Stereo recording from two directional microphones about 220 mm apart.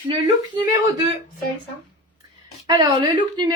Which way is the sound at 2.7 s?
20° right (ahead or behind).